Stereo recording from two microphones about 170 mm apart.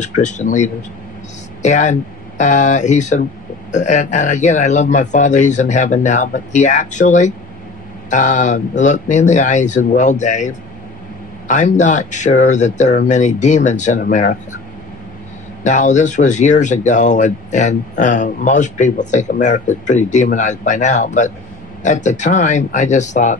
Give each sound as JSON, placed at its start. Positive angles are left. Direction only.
{"t": 0.0, "sound": "speech", "side_deg": 45}
{"t": 15.6, "sound": "speech", "side_deg": 45}